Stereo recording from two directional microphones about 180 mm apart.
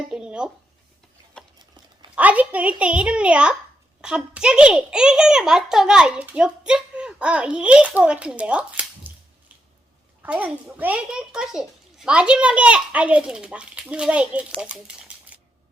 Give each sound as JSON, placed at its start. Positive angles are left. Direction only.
{"t": 0.1, "sound": "a sound", "side_deg": -5}
{"t": 2.1, "sound": "a child's voice", "side_deg": -10}
{"t": 10.2, "sound": "a child's voice", "side_deg": -10}